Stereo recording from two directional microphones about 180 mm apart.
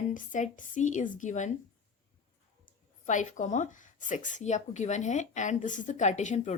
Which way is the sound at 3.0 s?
45° left (ahead or behind).